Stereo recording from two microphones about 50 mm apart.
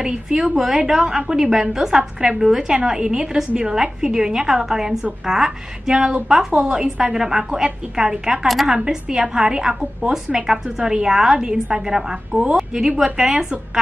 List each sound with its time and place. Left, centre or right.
0.0 s a woman's voice: centre